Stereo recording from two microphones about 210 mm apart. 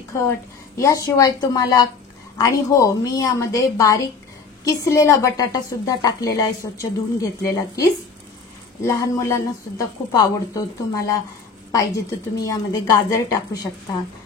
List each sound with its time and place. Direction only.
0.1 s a woman's voice: 15° left (ahead or behind)
8.8 s a woman's voice: 15° left (ahead or behind)
12.4 s a woman's voice: 15° left (ahead or behind)